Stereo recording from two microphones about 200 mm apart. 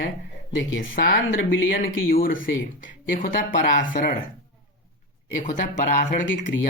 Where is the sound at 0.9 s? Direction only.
45° left (ahead or behind).